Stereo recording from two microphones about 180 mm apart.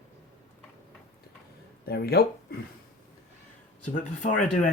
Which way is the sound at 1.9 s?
60° left (ahead or behind).